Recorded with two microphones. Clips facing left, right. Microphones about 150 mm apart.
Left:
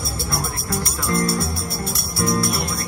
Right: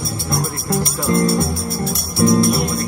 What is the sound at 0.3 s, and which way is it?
Music, 25° right (ahead or behind).